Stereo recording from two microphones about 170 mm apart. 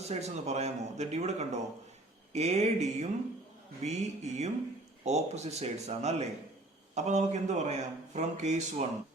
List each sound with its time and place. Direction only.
0.0 s a man's voice: 40° right (ahead or behind)